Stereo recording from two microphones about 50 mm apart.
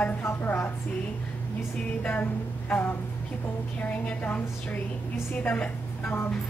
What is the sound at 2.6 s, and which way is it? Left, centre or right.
A woman's voice, left.